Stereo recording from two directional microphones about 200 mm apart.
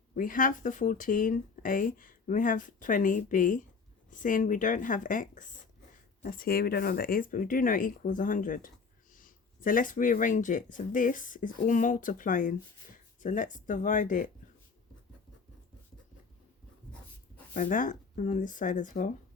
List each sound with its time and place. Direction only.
0.2 s speech: 40° left (ahead or behind)
17.5 s speech: 40° left (ahead or behind)